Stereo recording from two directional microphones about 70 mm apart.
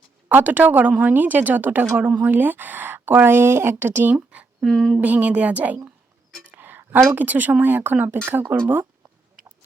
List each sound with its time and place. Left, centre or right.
0.3 s a woman's voice: right
4.1 s a woman's voice: centre
4.6 s speech: centre
4.9 s a woman's voice: right
6.4 s music: right
7.2 s a woman's voice: right